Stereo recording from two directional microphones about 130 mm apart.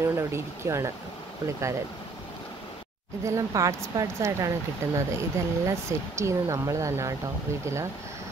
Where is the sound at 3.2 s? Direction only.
25° right (ahead or behind).